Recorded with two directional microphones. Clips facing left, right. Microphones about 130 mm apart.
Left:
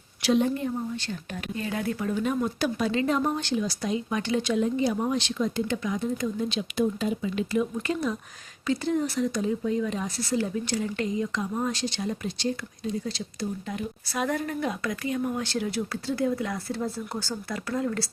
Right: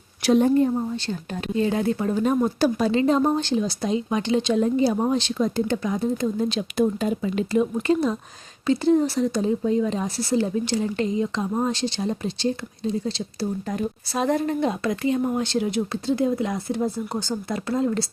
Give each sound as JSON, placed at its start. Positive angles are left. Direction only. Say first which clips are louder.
{"t": 0.2, "sound": "speech", "louder": "right 6 dB", "side_deg": -45}
{"t": 4.5, "sound": "speech", "louder": "right 4 dB", "side_deg": -35}